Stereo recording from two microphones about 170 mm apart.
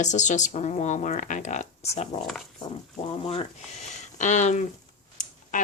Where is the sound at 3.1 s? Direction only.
35° left (ahead or behind).